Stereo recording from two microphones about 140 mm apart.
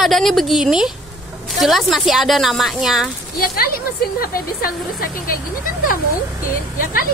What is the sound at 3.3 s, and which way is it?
A woman's voice, 90° left.